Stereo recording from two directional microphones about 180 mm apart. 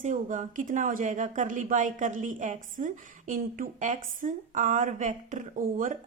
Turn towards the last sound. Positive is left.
turn(degrees=-50)  # may be behind; listen again after turning